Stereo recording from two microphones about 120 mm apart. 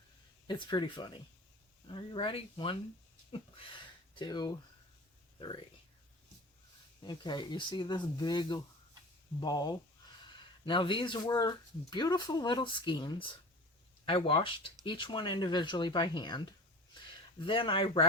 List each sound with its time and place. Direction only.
0.4 s speech: 40° left (ahead or behind)
7.0 s speech: 40° left (ahead or behind)
10.2 s a sound: 45° left (ahead or behind)
11.3 s speech: 35° left (ahead or behind)